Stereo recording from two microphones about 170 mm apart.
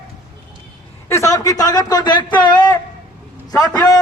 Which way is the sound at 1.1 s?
20° left (ahead or behind).